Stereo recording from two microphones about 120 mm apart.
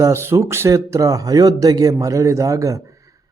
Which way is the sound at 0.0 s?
20° right (ahead or behind).